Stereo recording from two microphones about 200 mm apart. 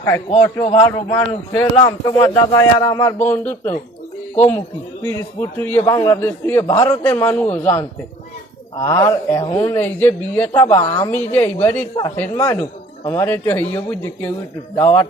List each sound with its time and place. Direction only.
0.6 s speech: 25° left (ahead or behind)